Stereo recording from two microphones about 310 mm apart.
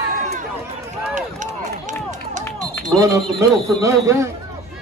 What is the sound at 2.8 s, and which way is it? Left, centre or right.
Speech, centre.